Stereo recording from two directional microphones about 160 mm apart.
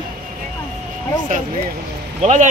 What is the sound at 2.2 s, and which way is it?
Speech, 45° right (ahead or behind).